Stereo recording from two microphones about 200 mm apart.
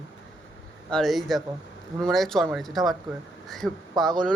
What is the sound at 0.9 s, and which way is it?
Speech, centre (ahead or behind).